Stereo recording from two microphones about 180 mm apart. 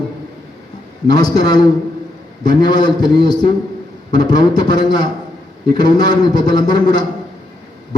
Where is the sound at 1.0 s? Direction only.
20° left (ahead or behind).